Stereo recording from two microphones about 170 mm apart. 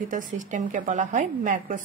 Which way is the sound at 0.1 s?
50° right (ahead or behind).